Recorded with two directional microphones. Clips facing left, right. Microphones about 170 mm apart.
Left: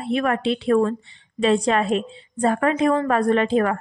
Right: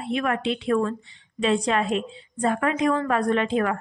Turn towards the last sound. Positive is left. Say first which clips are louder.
# left 4 dB
turn(degrees=40)  # may be behind; listen again after turning